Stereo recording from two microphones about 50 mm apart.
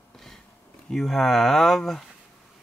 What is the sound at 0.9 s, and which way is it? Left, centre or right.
Speech, centre.